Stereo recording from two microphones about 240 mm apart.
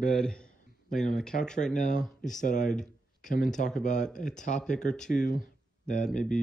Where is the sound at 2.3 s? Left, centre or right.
Left.